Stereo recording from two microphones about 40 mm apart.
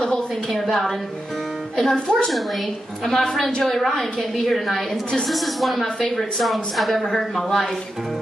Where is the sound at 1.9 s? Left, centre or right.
Left.